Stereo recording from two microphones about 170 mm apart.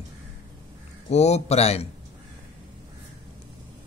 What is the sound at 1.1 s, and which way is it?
Speech, 40° left (ahead or behind).